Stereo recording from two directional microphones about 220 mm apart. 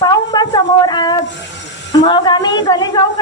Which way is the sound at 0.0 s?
20° left (ahead or behind).